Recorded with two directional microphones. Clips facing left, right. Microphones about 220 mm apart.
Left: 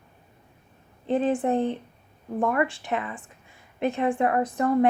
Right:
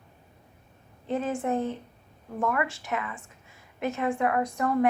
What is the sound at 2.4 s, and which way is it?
A woman's voice, 30° left (ahead or behind).